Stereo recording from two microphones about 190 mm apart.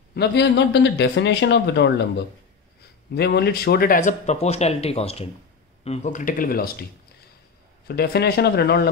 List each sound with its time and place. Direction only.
0.1 s speech: 60° left (ahead or behind)
3.1 s speech: 55° left (ahead or behind)
7.9 s speech: 55° left (ahead or behind)